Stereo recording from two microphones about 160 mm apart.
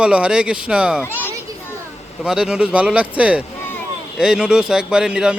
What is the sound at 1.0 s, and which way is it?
Speech, 15° left (ahead or behind).